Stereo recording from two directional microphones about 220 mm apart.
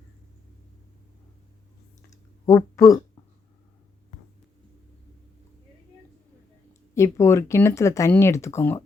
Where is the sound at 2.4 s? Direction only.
15° left (ahead or behind).